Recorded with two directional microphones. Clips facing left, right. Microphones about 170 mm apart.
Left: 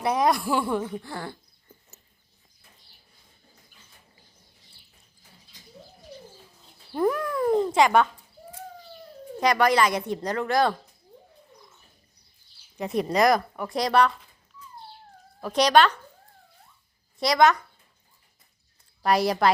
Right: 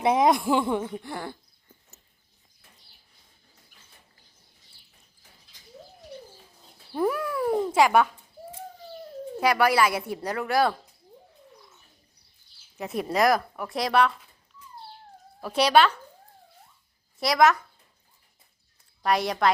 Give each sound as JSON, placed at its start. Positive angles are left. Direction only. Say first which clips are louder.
{"t": 0.0, "sound": "speech", "louder": "right 2 dB", "side_deg": -20}
{"t": 6.9, "sound": "speech", "louder": "left 2 dB", "side_deg": -5}
{"t": 9.4, "sound": "a woman's voice", "louder": "left 1 dB", "side_deg": -5}
{"t": 12.7, "sound": "speech", "louder": "left 3 dB", "side_deg": -5}
{"t": 15.4, "sound": "a woman's voice", "louder": "left 1 dB", "side_deg": -5}
{"t": 17.2, "sound": "speech", "louder": "left 1 dB", "side_deg": 0}
{"t": 19.0, "sound": "speech", "louder": "left 2 dB", "side_deg": 0}